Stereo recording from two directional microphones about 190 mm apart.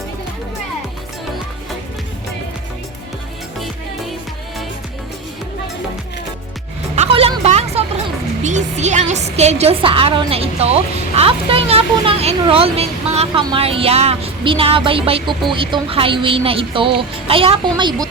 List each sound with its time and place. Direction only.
6.9 s music: 35° right (ahead or behind)
8.4 s a woman's voice: 40° right (ahead or behind)